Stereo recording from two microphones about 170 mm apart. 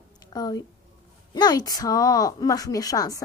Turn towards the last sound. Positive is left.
turn(degrees=20)  # may be behind; listen again after turning